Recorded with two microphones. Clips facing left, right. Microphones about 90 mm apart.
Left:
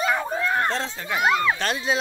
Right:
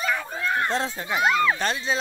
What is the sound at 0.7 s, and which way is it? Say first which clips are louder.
Speech: right 1 dB; 5° right (ahead or behind).